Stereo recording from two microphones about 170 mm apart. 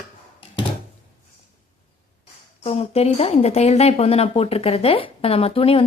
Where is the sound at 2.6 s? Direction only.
35° left (ahead or behind).